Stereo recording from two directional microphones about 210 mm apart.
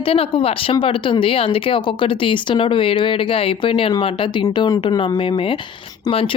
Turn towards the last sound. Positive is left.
turn(degrees=25)  # may be behind; listen again after turning